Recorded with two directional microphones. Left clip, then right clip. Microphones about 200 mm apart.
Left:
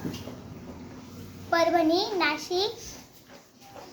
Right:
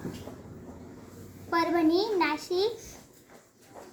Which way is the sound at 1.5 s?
10° left (ahead or behind).